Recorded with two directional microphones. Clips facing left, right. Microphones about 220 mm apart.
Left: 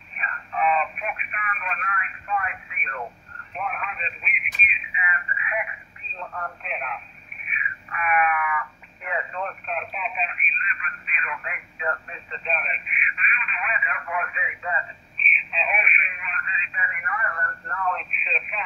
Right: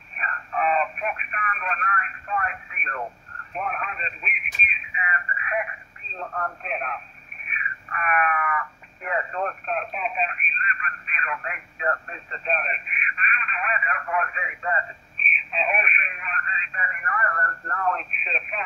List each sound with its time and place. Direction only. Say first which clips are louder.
0.1 s radio: right 2 dB; 45° right (ahead or behind)
6.1 s speech: right 3 dB; 40° right (ahead or behind)